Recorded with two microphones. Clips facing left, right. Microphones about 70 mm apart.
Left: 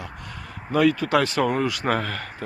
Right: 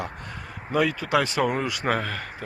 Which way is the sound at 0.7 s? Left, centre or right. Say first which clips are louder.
Left 3 dB; centre.